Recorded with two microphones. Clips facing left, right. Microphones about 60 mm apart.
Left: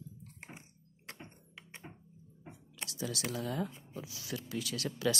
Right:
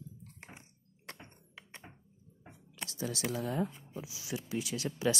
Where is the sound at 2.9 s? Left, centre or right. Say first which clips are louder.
Right 2 dB; right.